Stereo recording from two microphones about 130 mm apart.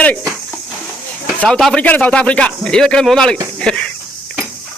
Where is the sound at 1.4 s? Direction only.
5° left (ahead or behind).